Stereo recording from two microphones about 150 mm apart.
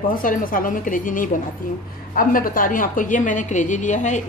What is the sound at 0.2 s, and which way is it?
Speech, 65° left (ahead or behind).